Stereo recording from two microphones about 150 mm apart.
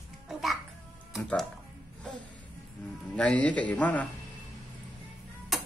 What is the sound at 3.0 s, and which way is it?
Speech, 10° left (ahead or behind).